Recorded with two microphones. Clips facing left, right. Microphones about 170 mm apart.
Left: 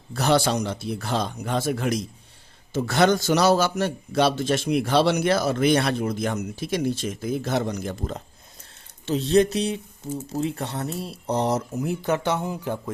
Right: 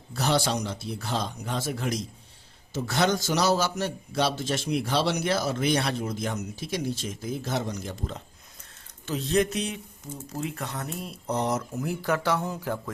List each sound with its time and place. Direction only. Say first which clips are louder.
0.1 s a man's voice: left 5 dB; 55° left (ahead or behind)
9.0 s speech: left 6 dB; 30° left (ahead or behind)